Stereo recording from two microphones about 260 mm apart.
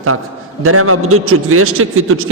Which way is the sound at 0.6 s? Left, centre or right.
Right.